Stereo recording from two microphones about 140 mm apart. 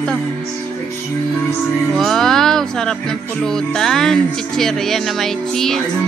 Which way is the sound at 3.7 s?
5° left (ahead or behind).